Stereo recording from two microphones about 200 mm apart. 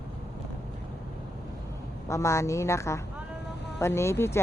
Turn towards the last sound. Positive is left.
turn(degrees=10)  # may be behind; listen again after turning